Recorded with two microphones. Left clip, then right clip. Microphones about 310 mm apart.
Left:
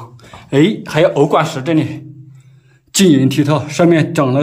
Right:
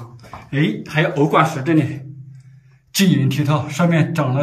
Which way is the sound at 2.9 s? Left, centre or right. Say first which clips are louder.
Left 8 dB; centre.